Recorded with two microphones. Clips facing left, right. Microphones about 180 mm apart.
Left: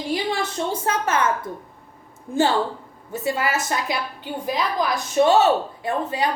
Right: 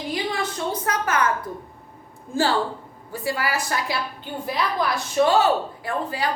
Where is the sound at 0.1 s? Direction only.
30° left (ahead or behind).